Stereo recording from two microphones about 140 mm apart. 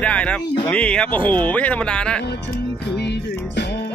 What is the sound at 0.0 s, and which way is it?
Speech, 10° left (ahead or behind).